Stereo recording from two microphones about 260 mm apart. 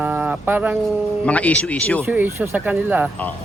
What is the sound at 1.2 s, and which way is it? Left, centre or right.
Speech, centre.